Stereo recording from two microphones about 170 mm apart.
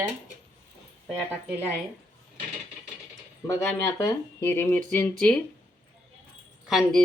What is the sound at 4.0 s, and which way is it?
Speech, 15° left (ahead or behind).